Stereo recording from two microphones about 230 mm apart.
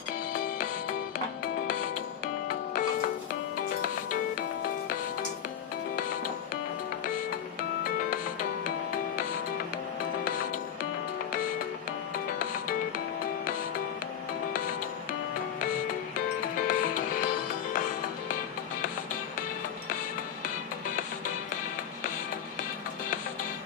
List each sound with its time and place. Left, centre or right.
2.7 s music: left
16.6 s music: left